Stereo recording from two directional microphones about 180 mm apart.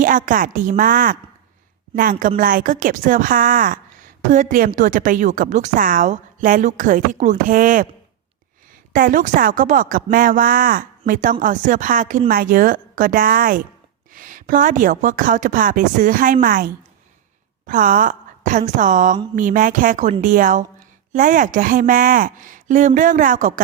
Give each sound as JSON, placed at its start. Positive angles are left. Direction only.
{"t": 0.0, "sound": "a woman's voice", "side_deg": -50}
{"t": 8.9, "sound": "a woman's voice", "side_deg": -50}
{"t": 17.7, "sound": "a woman's voice", "side_deg": -50}